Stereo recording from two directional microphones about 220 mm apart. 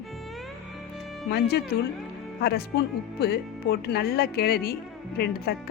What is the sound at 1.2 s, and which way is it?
Speech, 45° left (ahead or behind).